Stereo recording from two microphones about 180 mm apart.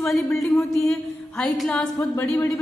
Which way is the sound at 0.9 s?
5° left (ahead or behind).